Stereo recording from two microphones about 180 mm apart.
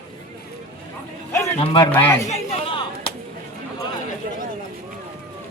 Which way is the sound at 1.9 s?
10° left (ahead or behind).